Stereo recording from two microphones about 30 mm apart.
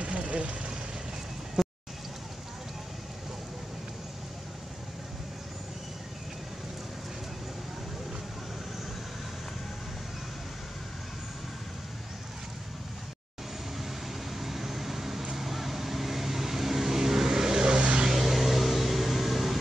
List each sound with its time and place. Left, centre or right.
0.0 s vehicle: right
1.6 s vehicle: centre
14.3 s a sound: centre
15.3 s vehicle: centre; by 17.7 s right
17.7 s vehicle: right
18.0 s vehicle: centre